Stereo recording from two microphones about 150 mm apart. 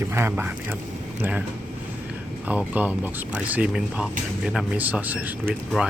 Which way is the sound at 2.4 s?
10° right (ahead or behind).